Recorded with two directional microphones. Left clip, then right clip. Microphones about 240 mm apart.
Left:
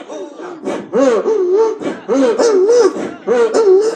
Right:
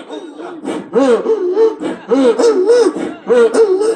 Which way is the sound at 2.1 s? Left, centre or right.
Right.